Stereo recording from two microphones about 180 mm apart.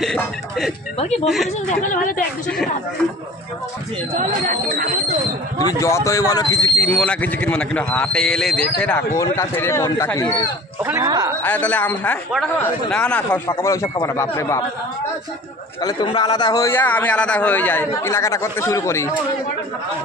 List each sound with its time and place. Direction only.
0.0 s music: centre (ahead or behind)
1.2 s speech: centre (ahead or behind)
1.8 s speech: 45° left (ahead or behind)
2.4 s speech: 5° left (ahead or behind)
4.2 s speech: 45° right (ahead or behind)
5.6 s speech: 20° left (ahead or behind)
10.8 s speech: 15° right (ahead or behind)
11.4 s speech: 10° left (ahead or behind)
13.6 s speech: 15° left (ahead or behind)
15.8 s speech: 25° left (ahead or behind)